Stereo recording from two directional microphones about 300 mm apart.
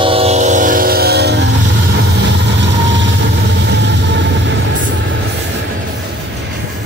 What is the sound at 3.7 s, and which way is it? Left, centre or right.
Vehicle, right.